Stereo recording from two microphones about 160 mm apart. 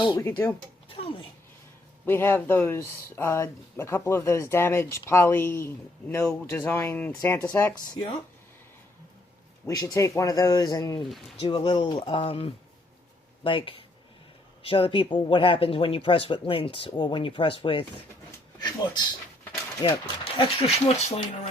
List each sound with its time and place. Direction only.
0.0 s speech: 30° left (ahead or behind)
0.3 s speech: 15° left (ahead or behind)
2.0 s speech: 15° left (ahead or behind)
9.6 s speech: 20° left (ahead or behind)
18.3 s a sound: 25° left (ahead or behind)
19.8 s speech: 30° left (ahead or behind)